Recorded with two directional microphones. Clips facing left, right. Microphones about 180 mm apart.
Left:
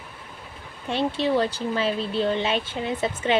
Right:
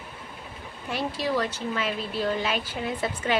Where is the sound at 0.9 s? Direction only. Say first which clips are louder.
Left 5 dB; 25° left (ahead or behind).